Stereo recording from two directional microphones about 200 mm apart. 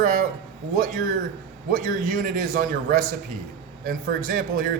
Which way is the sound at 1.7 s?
40° right (ahead or behind).